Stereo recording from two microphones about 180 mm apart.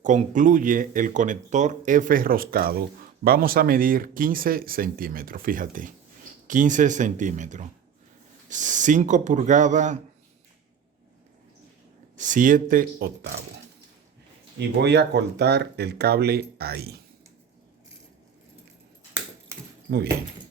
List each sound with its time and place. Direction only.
0.0 s speech: 45° right (ahead or behind)
12.1 s speech: 45° right (ahead or behind)
14.8 s speech: 70° right (ahead or behind)
19.9 s speech: 55° right (ahead or behind)